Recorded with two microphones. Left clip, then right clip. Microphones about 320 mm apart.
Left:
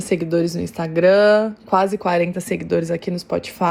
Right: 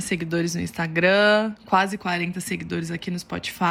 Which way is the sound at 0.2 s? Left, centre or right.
Centre.